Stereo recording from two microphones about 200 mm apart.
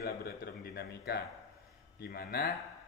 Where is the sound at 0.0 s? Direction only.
50° left (ahead or behind).